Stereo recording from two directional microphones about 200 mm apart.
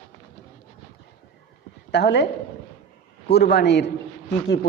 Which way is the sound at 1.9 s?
55° left (ahead or behind).